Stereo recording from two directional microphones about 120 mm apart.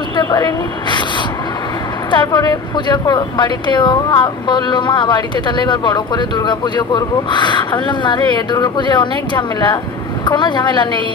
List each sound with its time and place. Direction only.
0.1 s a woman's voice: 35° left (ahead or behind)
2.0 s speech: 40° left (ahead or behind)